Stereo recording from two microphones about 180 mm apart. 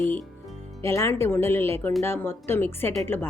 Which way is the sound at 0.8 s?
15° left (ahead or behind).